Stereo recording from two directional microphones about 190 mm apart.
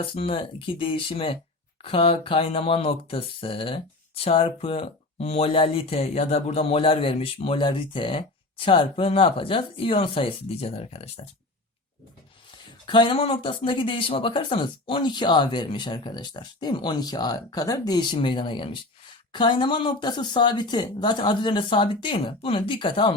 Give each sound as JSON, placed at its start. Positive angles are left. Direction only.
{"t": 0.0, "sound": "speech", "side_deg": 30}
{"t": 12.8, "sound": "speech", "side_deg": 25}